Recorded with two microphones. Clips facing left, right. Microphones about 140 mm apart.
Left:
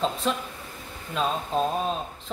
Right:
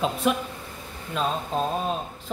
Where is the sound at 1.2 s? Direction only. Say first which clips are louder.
Left 1 dB; centre (ahead or behind).